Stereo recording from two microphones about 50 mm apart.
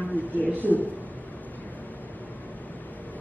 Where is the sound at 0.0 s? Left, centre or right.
Left.